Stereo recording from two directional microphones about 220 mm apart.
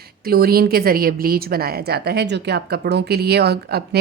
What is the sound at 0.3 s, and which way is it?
A woman's voice, 45° right (ahead or behind).